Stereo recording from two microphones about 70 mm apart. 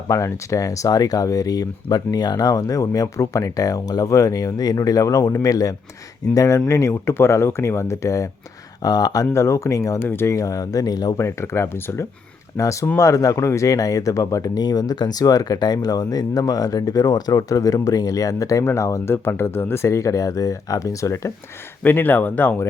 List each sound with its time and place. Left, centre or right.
0.1 s speech: left
8.8 s speech: left
9.3 s speech: left
10.0 s speech: left
10.2 s speech: left
11.2 s speech: left
19.0 s speech: left
21.8 s speech: left